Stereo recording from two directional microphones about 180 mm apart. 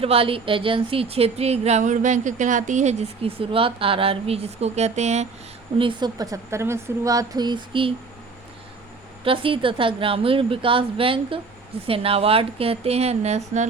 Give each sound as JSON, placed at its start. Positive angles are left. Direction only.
{"t": 0.0, "sound": "speech", "side_deg": -30}
{"t": 5.7, "sound": "a woman's voice", "side_deg": -30}
{"t": 9.2, "sound": "a woman's voice", "side_deg": -30}